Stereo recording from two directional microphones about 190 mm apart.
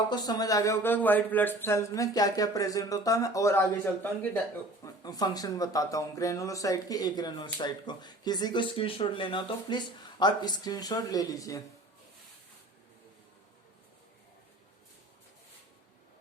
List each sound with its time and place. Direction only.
0.1 s speech: 20° left (ahead or behind)